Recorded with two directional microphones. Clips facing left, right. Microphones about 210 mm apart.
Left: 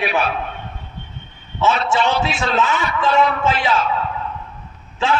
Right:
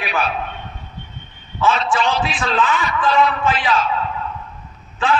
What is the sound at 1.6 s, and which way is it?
A man's voice, 25° left (ahead or behind).